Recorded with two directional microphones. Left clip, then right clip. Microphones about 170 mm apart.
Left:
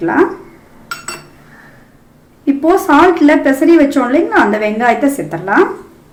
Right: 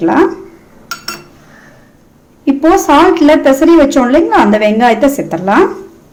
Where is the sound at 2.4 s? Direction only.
55° right (ahead or behind).